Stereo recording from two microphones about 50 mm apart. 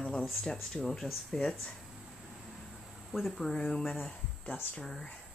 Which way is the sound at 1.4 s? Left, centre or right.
Centre.